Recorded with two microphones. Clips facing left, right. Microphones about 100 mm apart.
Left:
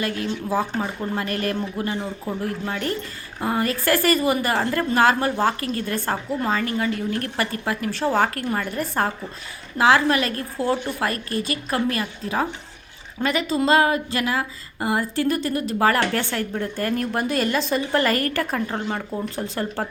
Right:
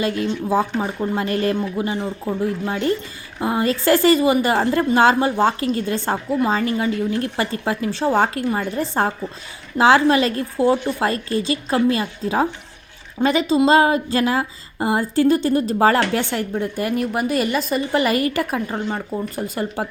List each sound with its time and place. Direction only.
0.0 s a woman's voice: 20° right (ahead or behind)